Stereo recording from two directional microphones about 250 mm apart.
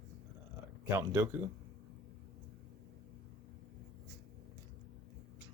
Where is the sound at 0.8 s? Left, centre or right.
Centre.